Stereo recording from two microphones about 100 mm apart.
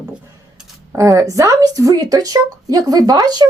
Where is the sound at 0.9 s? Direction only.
30° right (ahead or behind).